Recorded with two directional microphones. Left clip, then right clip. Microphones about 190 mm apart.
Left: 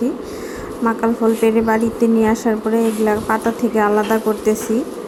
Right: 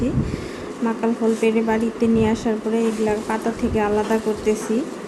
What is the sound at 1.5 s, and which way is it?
A woman's voice, 15° left (ahead or behind).